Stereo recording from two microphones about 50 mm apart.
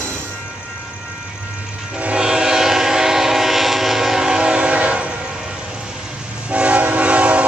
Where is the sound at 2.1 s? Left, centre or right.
Centre.